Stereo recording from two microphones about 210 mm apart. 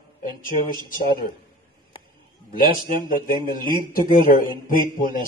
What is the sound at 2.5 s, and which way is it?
A man's voice, 40° left (ahead or behind).